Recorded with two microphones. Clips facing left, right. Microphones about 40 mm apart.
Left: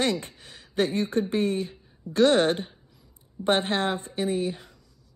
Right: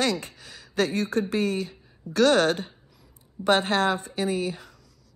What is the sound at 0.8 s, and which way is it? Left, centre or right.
Speech, left.